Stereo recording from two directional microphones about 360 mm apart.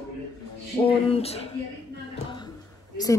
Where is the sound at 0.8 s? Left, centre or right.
Centre.